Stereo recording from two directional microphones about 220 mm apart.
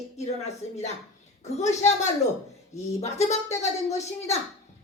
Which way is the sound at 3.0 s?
30° left (ahead or behind).